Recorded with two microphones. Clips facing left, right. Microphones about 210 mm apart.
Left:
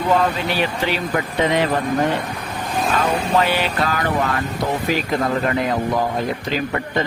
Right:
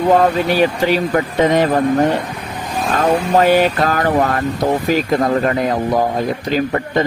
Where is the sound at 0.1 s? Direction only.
45° right (ahead or behind).